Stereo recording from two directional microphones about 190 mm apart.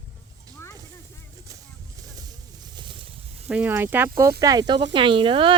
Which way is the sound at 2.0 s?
20° right (ahead or behind).